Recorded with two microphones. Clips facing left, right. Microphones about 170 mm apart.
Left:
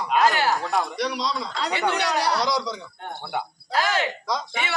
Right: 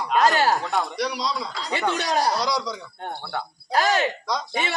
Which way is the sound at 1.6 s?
70° left (ahead or behind).